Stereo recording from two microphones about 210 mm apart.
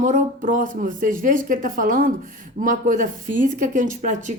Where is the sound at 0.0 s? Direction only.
35° right (ahead or behind).